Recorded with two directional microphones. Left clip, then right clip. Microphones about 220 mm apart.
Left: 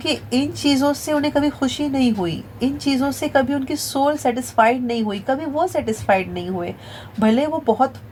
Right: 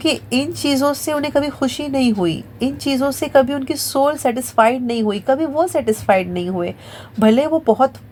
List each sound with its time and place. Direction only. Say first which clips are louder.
0.0 s a woman's voice: right 3 dB; 40° right (ahead or behind)